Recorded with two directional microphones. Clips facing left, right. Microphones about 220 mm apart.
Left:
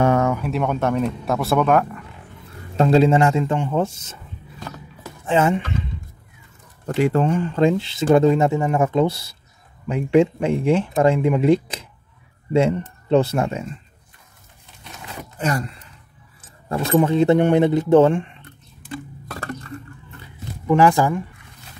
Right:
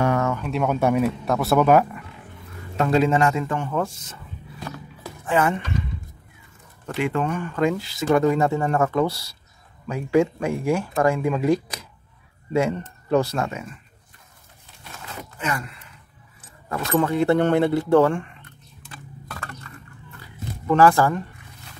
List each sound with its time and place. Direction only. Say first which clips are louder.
0.0 s a sound: left 4 dB; 25° left (ahead or behind)
0.3 s speech: left 1 dB; 5° left (ahead or behind)
2.8 s speech: left 4 dB; 30° left (ahead or behind)
5.2 s speech: left 3 dB; 25° left (ahead or behind)
7.0 s speech: left 5 dB; 35° left (ahead or behind)
15.3 s speech: left 5 dB; 35° left (ahead or behind); by 18.3 s 20° left (ahead or behind)
20.6 s speech: left 1 dB; 15° left (ahead or behind)